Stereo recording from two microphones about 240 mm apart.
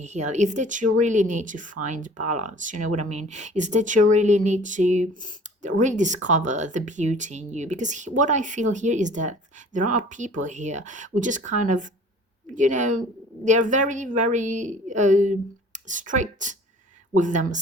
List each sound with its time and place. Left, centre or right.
0.0 s speech: right